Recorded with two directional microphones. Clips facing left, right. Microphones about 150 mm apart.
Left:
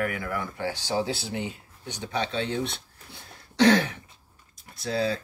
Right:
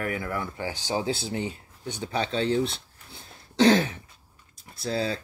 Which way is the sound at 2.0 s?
35° right (ahead or behind).